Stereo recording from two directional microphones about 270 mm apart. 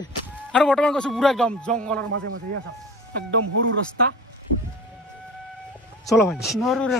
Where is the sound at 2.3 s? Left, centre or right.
Right.